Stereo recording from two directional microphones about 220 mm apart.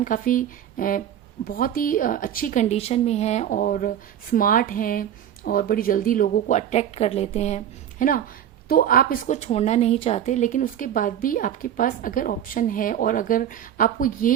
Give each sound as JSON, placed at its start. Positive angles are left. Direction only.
{"t": 0.0, "sound": "a woman's voice", "side_deg": 35}